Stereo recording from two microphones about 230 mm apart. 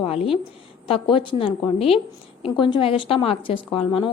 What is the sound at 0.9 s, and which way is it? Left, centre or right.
A woman's voice, left.